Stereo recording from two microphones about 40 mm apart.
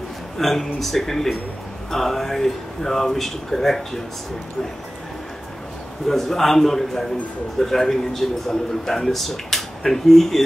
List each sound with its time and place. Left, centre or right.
0.4 s speech: centre
6.0 s speech: centre